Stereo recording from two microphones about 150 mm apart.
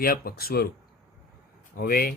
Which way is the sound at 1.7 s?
85° left.